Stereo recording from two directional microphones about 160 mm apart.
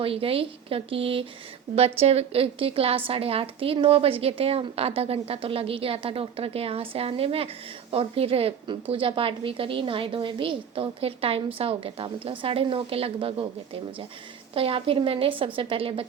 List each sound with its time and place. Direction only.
0.0 s a woman's voice: 35° right (ahead or behind)
14.5 s a woman's voice: 35° right (ahead or behind)